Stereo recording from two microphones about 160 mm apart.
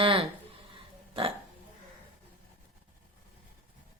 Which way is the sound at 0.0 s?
35° right (ahead or behind).